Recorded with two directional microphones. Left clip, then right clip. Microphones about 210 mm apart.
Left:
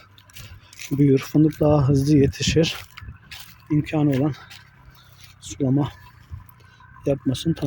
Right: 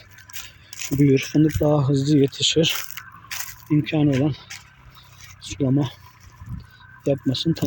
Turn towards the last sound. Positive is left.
turn(degrees=0)  # may be behind; listen again after turning